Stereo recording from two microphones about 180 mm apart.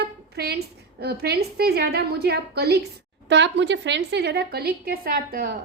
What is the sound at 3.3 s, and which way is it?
A woman's voice, 75° right (ahead or behind).